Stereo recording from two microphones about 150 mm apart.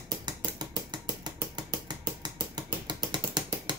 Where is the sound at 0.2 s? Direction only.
30° right (ahead or behind).